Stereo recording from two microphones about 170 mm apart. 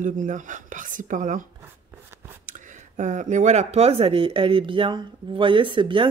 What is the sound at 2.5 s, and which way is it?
Speech, 50° right (ahead or behind).